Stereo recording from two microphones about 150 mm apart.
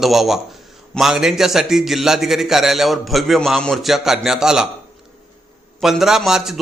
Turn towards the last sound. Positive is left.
turn(degrees=0)  # may be behind; listen again after turning